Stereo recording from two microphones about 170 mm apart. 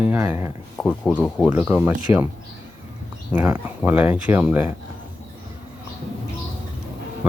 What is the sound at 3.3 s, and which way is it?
Speech, 10° right (ahead or behind).